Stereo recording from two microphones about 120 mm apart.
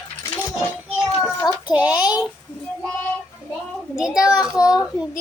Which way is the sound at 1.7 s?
10° right (ahead or behind).